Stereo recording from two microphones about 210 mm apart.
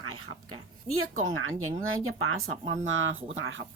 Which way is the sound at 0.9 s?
80° right.